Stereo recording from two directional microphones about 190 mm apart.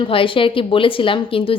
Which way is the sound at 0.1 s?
25° left (ahead or behind).